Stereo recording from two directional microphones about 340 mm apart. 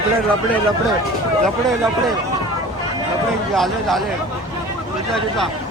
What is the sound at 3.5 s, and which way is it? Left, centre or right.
Speech, centre.